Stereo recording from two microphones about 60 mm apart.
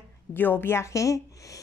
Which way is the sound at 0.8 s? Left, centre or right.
Left.